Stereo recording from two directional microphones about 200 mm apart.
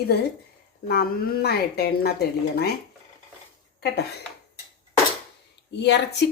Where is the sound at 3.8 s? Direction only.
50° left (ahead or behind).